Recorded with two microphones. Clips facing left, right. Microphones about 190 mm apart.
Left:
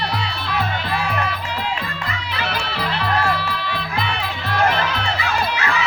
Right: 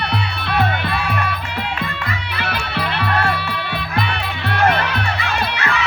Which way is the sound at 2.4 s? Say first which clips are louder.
Right 1 dB; 60° right (ahead or behind).